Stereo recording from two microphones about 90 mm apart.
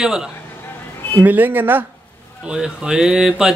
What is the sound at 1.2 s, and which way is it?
Speech, 20° right (ahead or behind).